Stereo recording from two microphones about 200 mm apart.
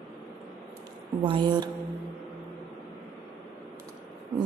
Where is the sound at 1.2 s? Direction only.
25° right (ahead or behind).